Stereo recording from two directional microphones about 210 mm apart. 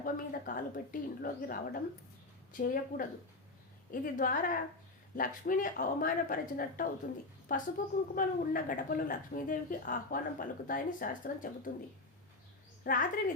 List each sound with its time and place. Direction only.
0.0 s a woman's voice: 40° left (ahead or behind)
12.8 s a woman's voice: 40° left (ahead or behind)